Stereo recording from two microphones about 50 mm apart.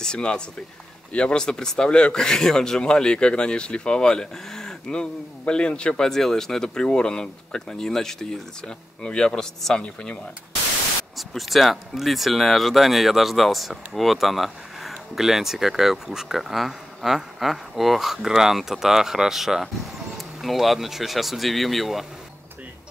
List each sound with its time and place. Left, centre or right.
0.0 s speech: centre
11.1 s speech: centre